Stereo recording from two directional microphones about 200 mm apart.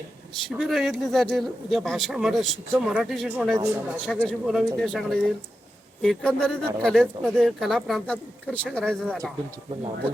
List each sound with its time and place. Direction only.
0.4 s speech: centre (ahead or behind)